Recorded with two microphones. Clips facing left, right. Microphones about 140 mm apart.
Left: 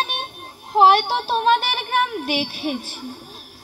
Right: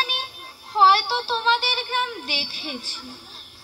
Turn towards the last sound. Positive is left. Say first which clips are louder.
# left 8 dB
turn(degrees=50)  # may be behind; listen again after turning